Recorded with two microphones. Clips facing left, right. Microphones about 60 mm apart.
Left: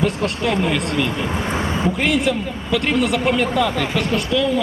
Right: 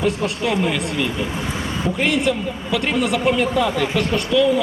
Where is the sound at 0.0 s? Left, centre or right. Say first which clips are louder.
Left 1 dB; centre.